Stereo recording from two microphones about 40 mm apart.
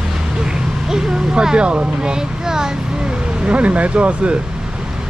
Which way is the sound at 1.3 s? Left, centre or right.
Right.